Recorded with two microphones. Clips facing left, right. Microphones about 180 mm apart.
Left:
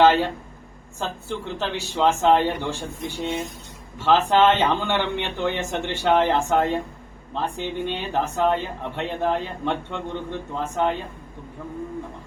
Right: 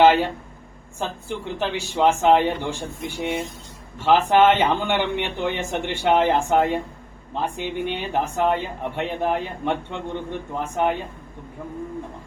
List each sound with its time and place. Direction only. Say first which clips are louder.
0.0 s speech: right 1 dB; 15° right (ahead or behind)
4.0 s speech: right 1 dB; 15° right (ahead or behind)